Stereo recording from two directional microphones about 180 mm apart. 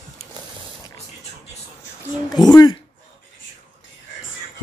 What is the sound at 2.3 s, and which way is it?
Speech, 20° left (ahead or behind).